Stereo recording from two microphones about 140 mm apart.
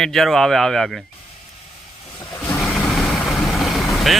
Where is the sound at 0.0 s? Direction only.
Centre (ahead or behind).